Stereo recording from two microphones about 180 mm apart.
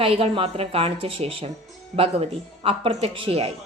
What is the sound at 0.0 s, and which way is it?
A woman's voice, 30° right (ahead or behind).